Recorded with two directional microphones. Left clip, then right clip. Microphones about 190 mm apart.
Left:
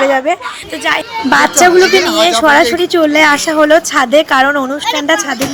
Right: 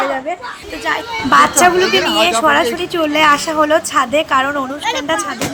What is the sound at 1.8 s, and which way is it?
A woman's voice, 30° left (ahead or behind).